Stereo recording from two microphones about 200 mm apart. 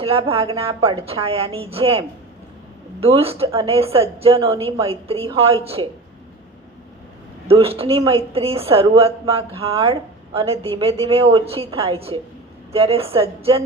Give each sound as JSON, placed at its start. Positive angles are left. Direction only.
{"t": 0.0, "sound": "speech", "side_deg": -30}
{"t": 7.4, "sound": "speech", "side_deg": -30}